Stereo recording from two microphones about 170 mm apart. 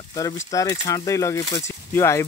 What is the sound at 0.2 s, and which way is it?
Speech, 20° left (ahead or behind).